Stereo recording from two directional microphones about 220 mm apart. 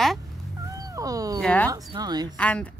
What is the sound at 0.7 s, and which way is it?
Speech, 15° right (ahead or behind).